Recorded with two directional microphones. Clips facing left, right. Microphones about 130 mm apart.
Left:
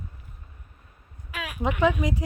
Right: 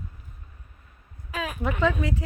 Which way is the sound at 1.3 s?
40° right (ahead or behind).